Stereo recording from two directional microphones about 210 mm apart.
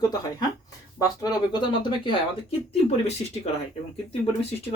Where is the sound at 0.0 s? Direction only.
15° left (ahead or behind).